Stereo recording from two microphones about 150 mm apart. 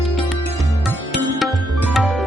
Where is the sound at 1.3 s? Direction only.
Centre (ahead or behind).